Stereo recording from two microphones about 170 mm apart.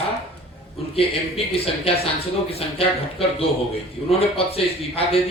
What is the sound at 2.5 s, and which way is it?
Speech, 35° left (ahead or behind).